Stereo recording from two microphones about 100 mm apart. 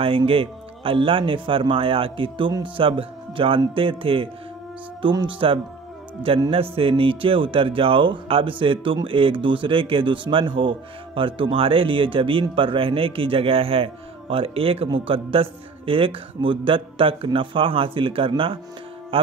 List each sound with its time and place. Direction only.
0.0 s a man's voice: 65° right (ahead or behind)